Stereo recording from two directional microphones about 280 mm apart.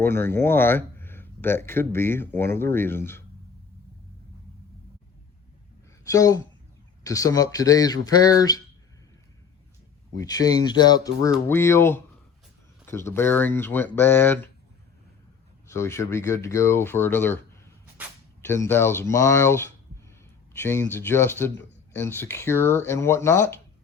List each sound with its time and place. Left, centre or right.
0.0 s speech: centre
6.1 s speech: centre
10.2 s speech: centre
15.7 s speech: centre
18.4 s speech: centre